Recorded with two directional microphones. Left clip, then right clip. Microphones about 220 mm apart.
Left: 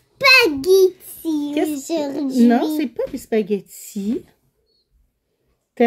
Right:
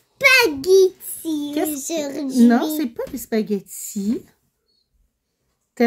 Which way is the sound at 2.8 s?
5° right (ahead or behind).